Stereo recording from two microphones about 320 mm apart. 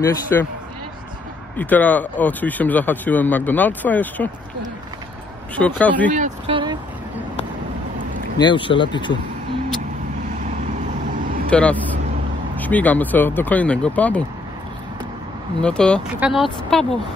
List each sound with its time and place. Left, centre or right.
0.0 s speech: centre
1.6 s speech: centre
5.6 s speech: centre
6.0 s speech: right
8.4 s speech: centre
11.5 s speech: centre
15.6 s speech: centre